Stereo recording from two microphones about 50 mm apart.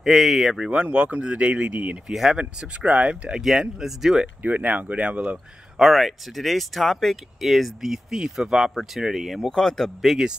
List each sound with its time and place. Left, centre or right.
0.0 s speech: centre
0.7 s speech: right
2.0 s speech: centre
2.3 s speech: right
3.3 s speech: centre
4.4 s speech: right
5.8 s speech: centre
9.5 s a man's voice: centre
10.0 s speech: centre